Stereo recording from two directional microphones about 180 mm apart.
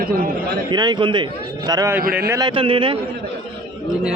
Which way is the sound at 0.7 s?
25° right (ahead or behind).